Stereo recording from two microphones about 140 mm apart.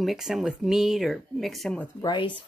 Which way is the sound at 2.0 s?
35° left (ahead or behind).